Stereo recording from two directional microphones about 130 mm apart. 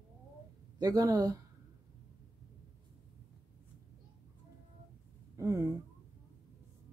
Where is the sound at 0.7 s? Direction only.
30° right (ahead or behind).